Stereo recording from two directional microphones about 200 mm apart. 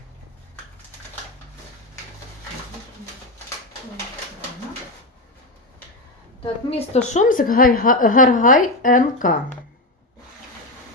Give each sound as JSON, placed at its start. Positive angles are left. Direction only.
{"t": 6.4, "sound": "a woman's voice", "side_deg": 30}
{"t": 7.1, "sound": "a woman's voice", "side_deg": 40}